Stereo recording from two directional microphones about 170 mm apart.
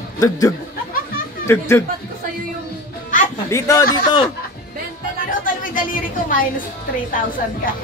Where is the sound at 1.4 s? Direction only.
15° left (ahead or behind).